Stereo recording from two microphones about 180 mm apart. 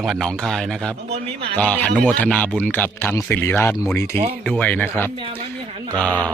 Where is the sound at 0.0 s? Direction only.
Centre (ahead or behind).